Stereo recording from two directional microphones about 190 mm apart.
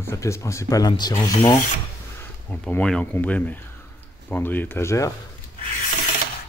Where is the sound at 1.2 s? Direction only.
20° left (ahead or behind).